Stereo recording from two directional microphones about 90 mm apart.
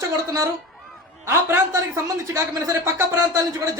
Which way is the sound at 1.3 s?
30° right (ahead or behind).